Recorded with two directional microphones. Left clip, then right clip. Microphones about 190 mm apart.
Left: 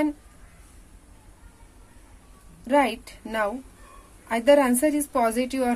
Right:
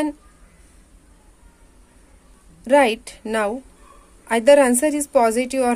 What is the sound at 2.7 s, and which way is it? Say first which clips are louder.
A woman's voice: right 6 dB; 40° right (ahead or behind).